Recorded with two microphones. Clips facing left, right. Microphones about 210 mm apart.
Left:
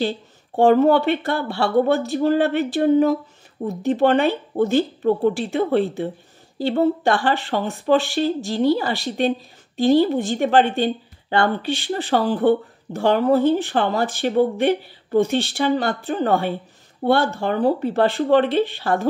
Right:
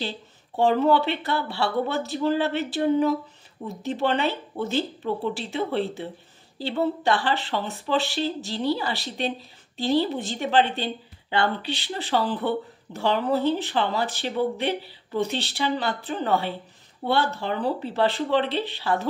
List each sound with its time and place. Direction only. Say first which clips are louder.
0.6 s speech: left 6 dB; 50° left (ahead or behind)